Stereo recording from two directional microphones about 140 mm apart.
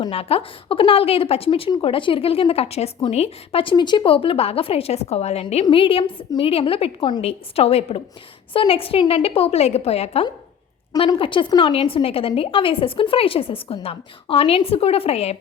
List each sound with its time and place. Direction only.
0.1 s a woman's voice: 45° left (ahead or behind)